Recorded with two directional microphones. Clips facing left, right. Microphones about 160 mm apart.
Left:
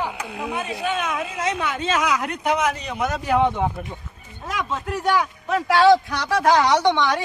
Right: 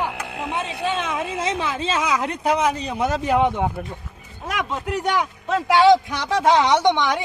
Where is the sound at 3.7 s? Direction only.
5° right (ahead or behind).